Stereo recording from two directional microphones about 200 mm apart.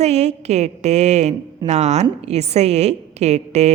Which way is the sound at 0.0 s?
35° right (ahead or behind).